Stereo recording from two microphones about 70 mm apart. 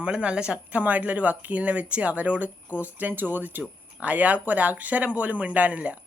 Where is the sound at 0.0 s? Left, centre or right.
Centre.